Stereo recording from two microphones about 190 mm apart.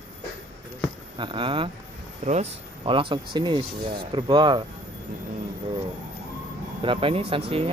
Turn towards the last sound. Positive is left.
turn(degrees=-30)  # may be behind; listen again after turning